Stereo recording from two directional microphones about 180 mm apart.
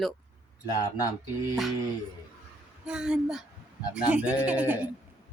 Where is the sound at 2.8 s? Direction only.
5° right (ahead or behind).